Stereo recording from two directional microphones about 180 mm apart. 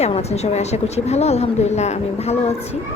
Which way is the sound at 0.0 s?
35° left (ahead or behind).